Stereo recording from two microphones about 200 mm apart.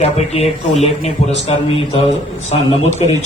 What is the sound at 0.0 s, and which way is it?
Speech, 30° left (ahead or behind).